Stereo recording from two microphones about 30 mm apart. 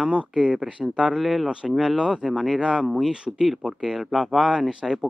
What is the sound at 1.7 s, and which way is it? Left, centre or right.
Speech, centre.